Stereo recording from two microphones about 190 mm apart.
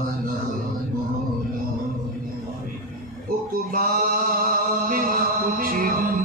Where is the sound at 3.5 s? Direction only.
50° right (ahead or behind).